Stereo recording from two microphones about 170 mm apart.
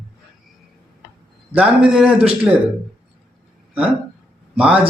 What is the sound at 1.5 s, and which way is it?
Speech, 5° right (ahead or behind).